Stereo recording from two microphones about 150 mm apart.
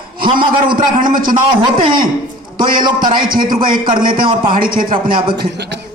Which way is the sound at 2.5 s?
70° right (ahead or behind).